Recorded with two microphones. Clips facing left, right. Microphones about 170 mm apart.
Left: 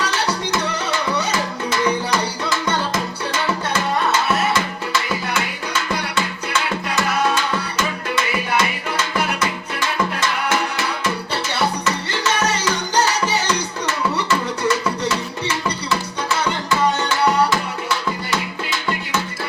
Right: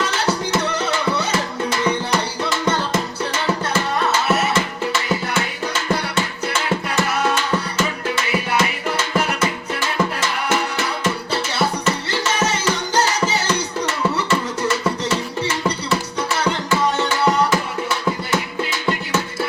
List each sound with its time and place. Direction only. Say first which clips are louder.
7.8 s music: even; 30° right (ahead or behind)